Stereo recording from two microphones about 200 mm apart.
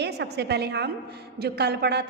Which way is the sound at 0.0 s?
60° right (ahead or behind).